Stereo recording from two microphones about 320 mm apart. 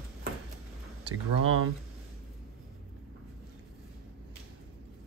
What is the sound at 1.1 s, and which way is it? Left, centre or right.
Speech, right.